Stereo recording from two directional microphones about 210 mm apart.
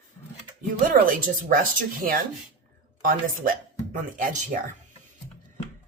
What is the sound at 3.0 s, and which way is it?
Speech, 40° right (ahead or behind).